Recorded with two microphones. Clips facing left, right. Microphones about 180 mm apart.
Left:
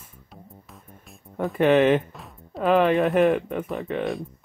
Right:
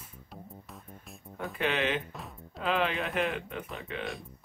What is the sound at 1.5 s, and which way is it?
Speech, 50° left (ahead or behind).